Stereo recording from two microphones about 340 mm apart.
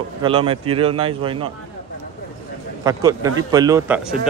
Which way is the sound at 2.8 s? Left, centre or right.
Centre.